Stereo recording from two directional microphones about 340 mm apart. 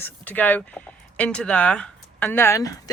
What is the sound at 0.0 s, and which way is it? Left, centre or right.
Speech, centre.